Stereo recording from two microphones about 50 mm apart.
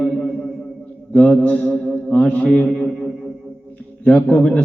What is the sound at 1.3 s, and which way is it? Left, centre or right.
A man's voice, left.